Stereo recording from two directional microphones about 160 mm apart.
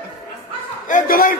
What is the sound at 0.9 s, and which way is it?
Speech, 60° left (ahead or behind).